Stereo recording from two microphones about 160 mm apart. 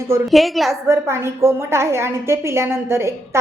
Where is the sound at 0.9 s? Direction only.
15° right (ahead or behind).